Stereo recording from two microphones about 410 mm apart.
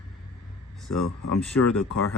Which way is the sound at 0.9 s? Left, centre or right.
Left.